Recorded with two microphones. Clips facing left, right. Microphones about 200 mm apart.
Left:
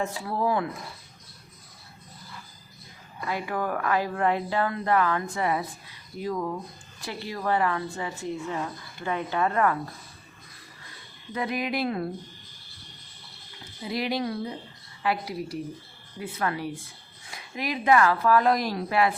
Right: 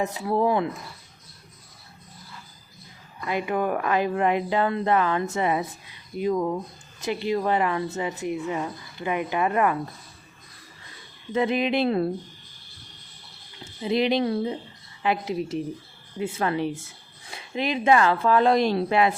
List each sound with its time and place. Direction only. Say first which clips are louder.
0.0 s speech: right 4 dB; 20° right (ahead or behind)
3.2 s a woman's voice: right 4 dB; 20° right (ahead or behind)
11.3 s speech: right 6 dB; 25° right (ahead or behind)
13.8 s speech: right 6 dB; 20° right (ahead or behind)